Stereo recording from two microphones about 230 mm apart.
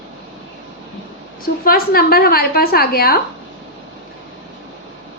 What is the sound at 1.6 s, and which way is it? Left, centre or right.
A woman's voice, left.